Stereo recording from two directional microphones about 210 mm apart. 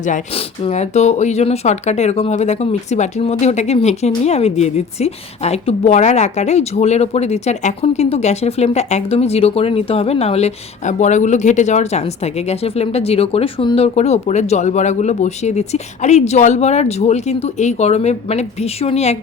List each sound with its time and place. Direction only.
0.0 s speech: 30° left (ahead or behind)